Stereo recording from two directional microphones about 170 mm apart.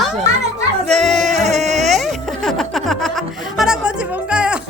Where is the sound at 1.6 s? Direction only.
45° right (ahead or behind).